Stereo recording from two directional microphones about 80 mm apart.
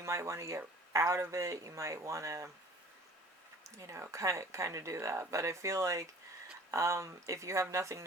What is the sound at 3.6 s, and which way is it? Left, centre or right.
Speech, right.